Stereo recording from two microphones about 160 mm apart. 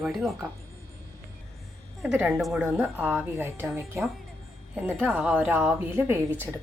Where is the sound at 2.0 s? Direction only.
5° right (ahead or behind).